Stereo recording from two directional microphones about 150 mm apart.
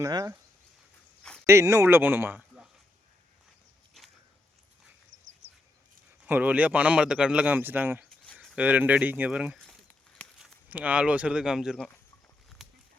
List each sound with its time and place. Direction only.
0.0 s speech: 25° right (ahead or behind)
1.5 s speech: 20° right (ahead or behind)
6.2 s speech: 10° right (ahead or behind)
8.2 s a sound: 5° left (ahead or behind)
8.5 s speech: 10° right (ahead or behind)
12.6 s livestock: centre (ahead or behind)